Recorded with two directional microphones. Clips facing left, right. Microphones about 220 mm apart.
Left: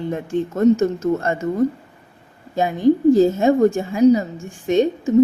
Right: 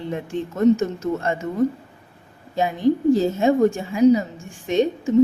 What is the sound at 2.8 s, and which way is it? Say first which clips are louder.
Speech: left 4 dB; 45° left (ahead or behind).